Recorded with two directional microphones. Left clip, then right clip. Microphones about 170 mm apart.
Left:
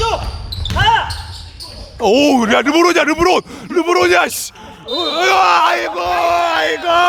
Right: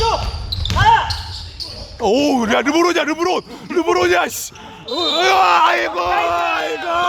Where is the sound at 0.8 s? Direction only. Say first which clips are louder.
Even; 55° left (ahead or behind).